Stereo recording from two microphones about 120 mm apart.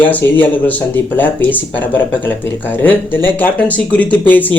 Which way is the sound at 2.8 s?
15° left (ahead or behind).